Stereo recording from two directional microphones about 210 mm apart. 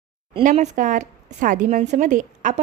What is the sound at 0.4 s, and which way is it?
A woman's voice, 35° right (ahead or behind).